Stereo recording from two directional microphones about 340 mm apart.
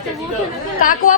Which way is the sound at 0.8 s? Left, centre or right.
Left.